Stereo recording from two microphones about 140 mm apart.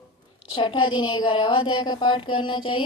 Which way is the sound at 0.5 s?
40° left (ahead or behind).